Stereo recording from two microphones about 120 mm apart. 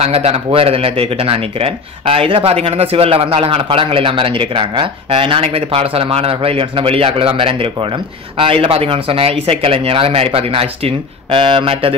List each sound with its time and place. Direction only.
0.0 s speech: 55° right (ahead or behind)